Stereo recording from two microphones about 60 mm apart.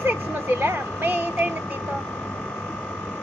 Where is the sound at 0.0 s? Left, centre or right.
Right.